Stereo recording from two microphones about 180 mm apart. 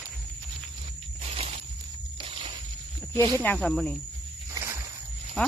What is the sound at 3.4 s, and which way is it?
Speech, 5° left (ahead or behind).